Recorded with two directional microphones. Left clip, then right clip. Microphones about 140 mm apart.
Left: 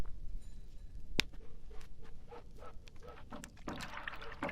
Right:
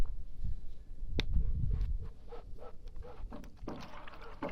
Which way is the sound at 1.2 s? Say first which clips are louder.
Left 4 dB; 20° left (ahead or behind).